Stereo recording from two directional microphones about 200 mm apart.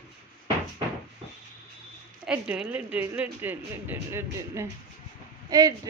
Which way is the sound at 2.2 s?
5° right (ahead or behind).